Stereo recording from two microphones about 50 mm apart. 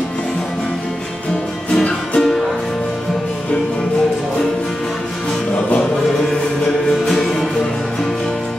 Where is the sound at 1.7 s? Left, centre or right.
Left.